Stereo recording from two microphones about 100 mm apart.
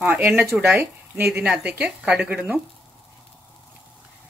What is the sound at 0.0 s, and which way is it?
Speech, 20° right (ahead or behind).